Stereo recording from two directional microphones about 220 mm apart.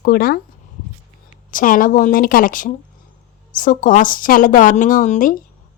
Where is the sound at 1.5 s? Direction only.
40° left (ahead or behind).